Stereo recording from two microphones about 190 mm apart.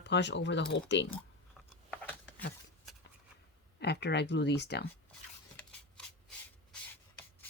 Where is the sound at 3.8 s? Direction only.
60° left (ahead or behind).